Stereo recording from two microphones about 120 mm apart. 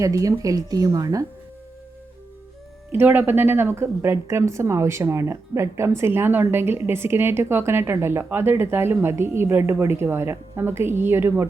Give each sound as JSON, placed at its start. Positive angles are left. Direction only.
{"t": 0.0, "sound": "a woman's voice", "side_deg": -30}
{"t": 2.9, "sound": "a woman's voice", "side_deg": -15}